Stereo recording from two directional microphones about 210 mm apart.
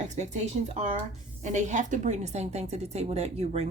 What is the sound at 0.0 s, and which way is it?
A woman's voice, 35° right (ahead or behind).